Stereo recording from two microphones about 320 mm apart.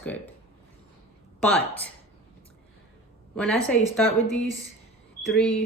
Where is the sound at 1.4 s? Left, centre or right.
Centre.